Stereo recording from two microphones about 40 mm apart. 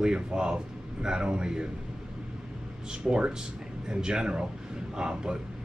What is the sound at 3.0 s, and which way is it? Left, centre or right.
Speech, centre.